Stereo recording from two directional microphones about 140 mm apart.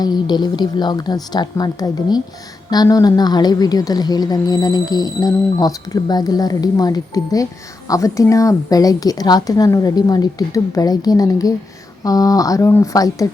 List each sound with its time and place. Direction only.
0.0 s a woman's voice: 30° left (ahead or behind)